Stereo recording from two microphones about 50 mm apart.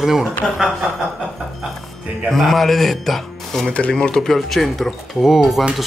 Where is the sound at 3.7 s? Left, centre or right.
Left.